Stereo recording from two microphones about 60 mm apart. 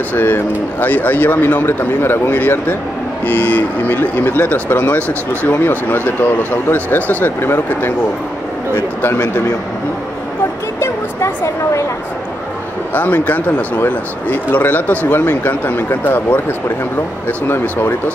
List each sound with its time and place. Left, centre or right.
0.1 s speech: left
9.0 s a man's voice: left
10.8 s speech: left
12.9 s speech: left
17.5 s speech: left